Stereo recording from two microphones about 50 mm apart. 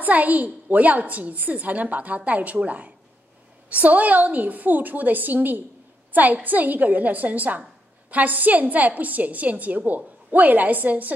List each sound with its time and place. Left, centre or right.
0.0 s a woman's voice: right